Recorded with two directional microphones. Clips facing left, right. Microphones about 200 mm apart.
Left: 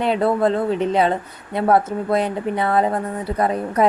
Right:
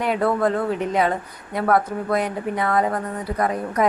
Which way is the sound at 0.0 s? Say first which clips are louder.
Left 2 dB; 25° left (ahead or behind).